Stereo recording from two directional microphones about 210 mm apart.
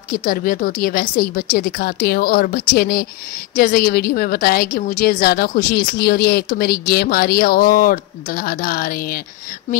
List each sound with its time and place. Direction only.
0.1 s a woman's voice: 40° left (ahead or behind)